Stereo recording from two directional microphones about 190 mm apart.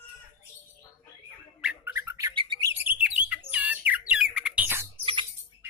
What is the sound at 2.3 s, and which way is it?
Bird, 25° right (ahead or behind).